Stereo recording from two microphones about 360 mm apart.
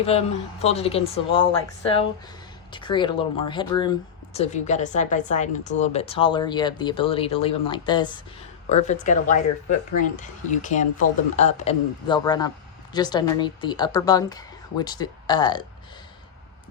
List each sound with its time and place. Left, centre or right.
0.0 s a woman's voice: centre